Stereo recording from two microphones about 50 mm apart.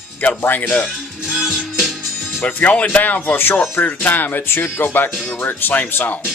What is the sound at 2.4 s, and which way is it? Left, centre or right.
Speech, left.